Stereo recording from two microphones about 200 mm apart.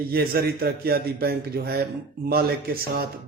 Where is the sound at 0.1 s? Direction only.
50° right (ahead or behind).